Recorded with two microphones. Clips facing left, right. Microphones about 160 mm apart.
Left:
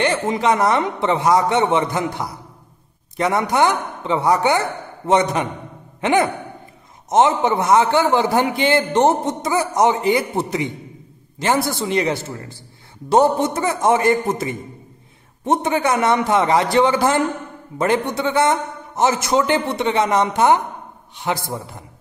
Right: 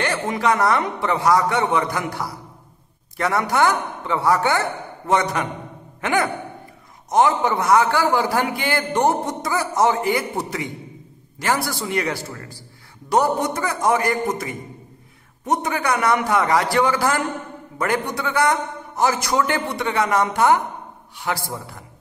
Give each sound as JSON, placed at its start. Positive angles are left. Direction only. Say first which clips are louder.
{"t": 0.0, "sound": "a man's voice", "louder": "left 3 dB", "side_deg": 20}